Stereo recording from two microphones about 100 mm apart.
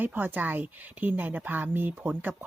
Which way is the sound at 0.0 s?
20° right (ahead or behind).